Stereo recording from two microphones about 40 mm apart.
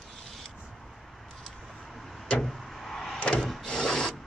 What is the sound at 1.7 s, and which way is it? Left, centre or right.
Vehicle, centre.